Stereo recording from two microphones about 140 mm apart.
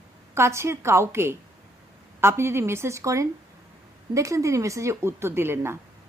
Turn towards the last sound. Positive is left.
turn(degrees=-15)  # may be behind; listen again after turning